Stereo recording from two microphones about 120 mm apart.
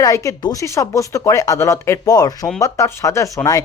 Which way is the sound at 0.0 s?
25° left (ahead or behind).